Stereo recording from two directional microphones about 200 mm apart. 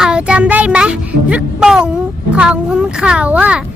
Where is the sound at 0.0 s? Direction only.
5° right (ahead or behind).